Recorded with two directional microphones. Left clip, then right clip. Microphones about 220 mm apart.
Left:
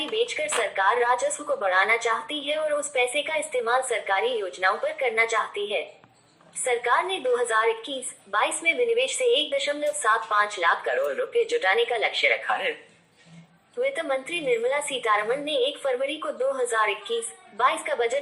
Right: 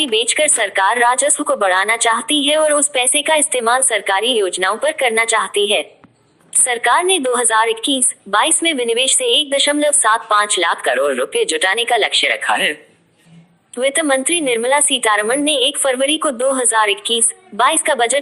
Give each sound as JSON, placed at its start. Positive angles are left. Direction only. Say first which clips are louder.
{"t": 0.0, "sound": "a woman's voice", "louder": "right 11 dB", "side_deg": -45}
{"t": 13.7, "sound": "a woman's voice", "louder": "right 10 dB", "side_deg": -45}